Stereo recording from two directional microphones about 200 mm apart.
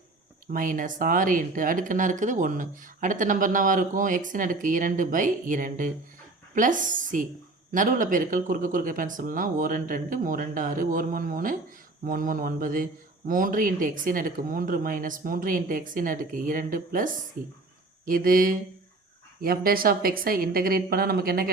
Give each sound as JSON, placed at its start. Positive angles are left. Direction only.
{"t": 0.5, "sound": "a man's voice", "side_deg": -40}